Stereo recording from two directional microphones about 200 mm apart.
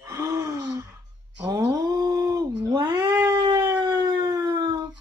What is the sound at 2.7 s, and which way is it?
Cat, 20° right (ahead or behind).